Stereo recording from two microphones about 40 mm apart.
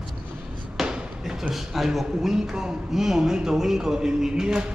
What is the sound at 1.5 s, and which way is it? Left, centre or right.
A man's voice, centre.